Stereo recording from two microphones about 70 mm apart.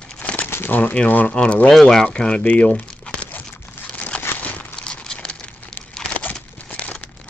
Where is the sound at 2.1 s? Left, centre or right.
Centre.